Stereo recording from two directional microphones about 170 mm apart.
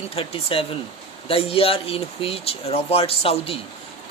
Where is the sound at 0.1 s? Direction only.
35° left (ahead or behind).